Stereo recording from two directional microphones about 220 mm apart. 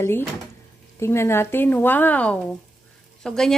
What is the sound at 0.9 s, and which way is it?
A woman's voice, 10° left (ahead or behind).